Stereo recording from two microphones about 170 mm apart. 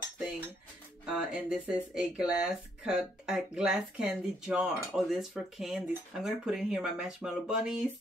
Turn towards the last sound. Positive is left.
turn(degrees=-5)  # may be behind; listen again after turning